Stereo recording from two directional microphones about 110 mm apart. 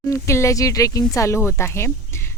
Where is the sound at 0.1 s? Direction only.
25° left (ahead or behind).